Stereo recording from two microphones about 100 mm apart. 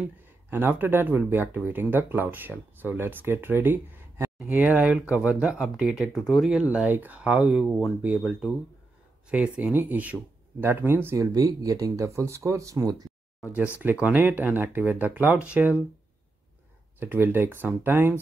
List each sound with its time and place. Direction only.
0.5 s speech: 20° right (ahead or behind)
11.3 s speech: 40° right (ahead or behind)
13.4 s speech: 15° right (ahead or behind)
17.0 s speech: 20° right (ahead or behind)